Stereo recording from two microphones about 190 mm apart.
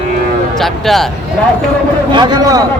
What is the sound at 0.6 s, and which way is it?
Speech, centre (ahead or behind).